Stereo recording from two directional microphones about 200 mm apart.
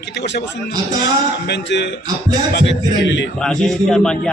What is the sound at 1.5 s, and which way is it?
A man's voice, 60° left (ahead or behind).